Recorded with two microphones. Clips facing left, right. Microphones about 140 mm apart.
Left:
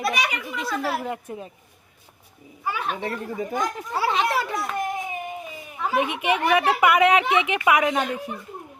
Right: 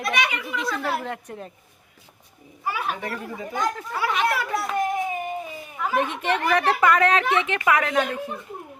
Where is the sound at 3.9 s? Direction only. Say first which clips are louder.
Left 3 dB; 30° left (ahead or behind).